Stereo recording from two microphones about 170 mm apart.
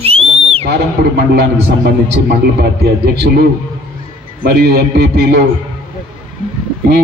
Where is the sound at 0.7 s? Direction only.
75° right (ahead or behind).